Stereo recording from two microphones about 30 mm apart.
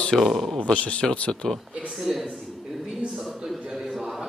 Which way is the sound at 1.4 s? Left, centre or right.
Left.